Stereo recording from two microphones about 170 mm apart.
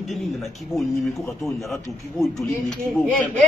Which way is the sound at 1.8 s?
20° left (ahead or behind).